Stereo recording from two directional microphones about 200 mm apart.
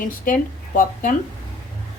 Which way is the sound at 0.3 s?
45° left (ahead or behind).